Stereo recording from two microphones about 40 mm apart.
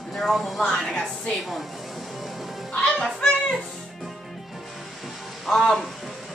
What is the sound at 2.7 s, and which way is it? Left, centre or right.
Music, left.